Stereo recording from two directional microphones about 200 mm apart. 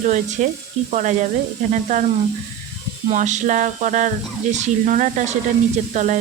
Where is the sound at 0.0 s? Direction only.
40° right (ahead or behind).